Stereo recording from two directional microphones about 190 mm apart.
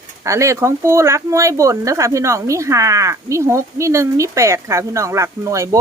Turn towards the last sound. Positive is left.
turn(degrees=-15)  # may be behind; listen again after turning